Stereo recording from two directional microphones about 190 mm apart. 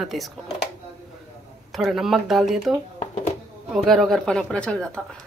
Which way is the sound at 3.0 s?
35° left (ahead or behind).